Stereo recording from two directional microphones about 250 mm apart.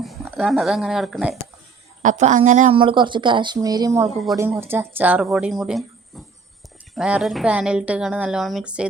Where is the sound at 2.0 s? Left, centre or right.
Right; by 4.0 s centre.